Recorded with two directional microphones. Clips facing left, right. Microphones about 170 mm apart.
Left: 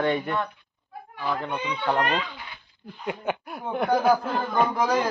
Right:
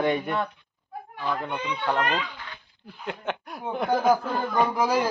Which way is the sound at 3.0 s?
5° left (ahead or behind).